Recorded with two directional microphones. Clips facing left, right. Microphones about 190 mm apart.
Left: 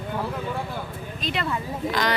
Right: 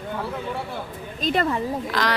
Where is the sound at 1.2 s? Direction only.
45° right (ahead or behind).